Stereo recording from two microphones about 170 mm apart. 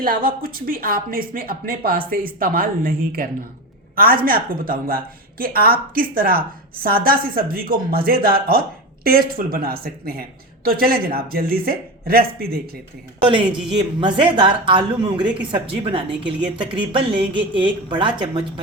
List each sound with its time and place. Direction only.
0.0 s a woman's voice: 55° right (ahead or behind)
13.2 s speech: 30° right (ahead or behind)